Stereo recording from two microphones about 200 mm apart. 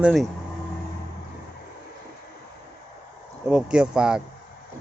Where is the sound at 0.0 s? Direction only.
Centre (ahead or behind).